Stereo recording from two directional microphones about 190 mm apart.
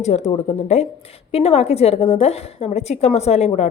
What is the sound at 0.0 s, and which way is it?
A woman's voice, 35° left (ahead or behind).